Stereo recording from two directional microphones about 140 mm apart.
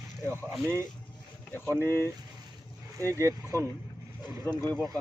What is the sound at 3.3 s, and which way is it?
Speech, 25° right (ahead or behind).